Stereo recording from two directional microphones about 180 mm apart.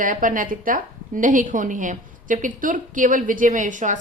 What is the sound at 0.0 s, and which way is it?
A woman's voice, 50° right (ahead or behind).